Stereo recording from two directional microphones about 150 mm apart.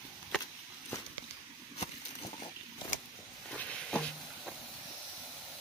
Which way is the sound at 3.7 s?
5° left (ahead or behind).